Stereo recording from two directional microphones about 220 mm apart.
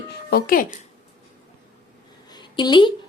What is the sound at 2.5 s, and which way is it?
Speech, 20° left (ahead or behind).